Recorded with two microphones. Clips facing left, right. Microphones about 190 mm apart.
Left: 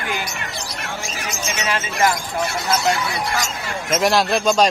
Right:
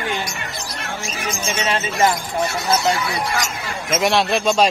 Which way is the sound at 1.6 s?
25° right (ahead or behind).